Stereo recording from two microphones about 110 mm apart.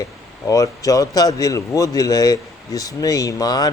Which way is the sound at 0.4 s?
30° left (ahead or behind).